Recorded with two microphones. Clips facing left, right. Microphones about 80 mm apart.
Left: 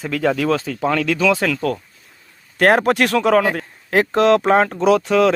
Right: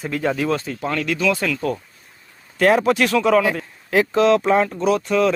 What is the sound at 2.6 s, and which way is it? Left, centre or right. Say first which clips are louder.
Speech: left 1 dB; left.